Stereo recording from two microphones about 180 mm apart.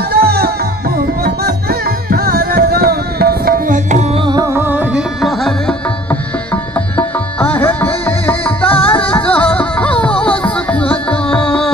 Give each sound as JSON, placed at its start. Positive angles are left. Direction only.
{"t": 0.1, "sound": "music", "side_deg": -60}
{"t": 4.2, "sound": "music", "side_deg": -20}